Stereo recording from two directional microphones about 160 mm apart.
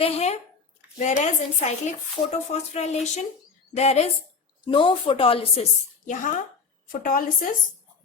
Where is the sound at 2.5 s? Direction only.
45° left (ahead or behind).